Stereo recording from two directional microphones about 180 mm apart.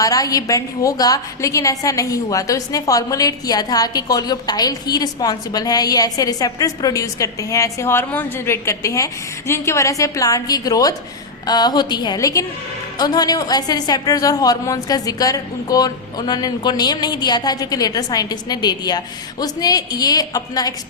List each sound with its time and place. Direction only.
0.0 s a woman's voice: 20° left (ahead or behind)